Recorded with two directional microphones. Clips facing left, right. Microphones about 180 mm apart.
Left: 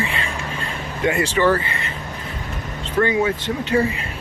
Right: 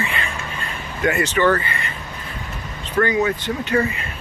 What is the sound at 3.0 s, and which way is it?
Speech, 25° left (ahead or behind).